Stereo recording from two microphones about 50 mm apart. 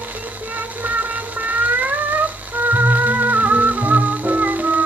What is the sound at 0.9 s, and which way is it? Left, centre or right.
Music, right.